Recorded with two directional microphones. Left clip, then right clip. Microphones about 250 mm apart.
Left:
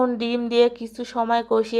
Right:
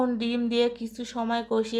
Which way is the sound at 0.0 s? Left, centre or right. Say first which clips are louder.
Left 5 dB; centre.